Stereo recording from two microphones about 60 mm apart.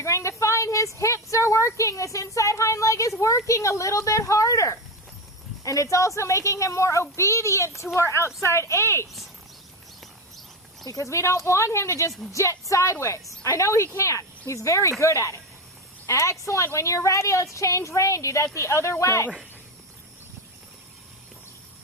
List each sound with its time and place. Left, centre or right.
0.0 s a woman's voice: left
10.8 s speech: left
11.1 s a woman's voice: left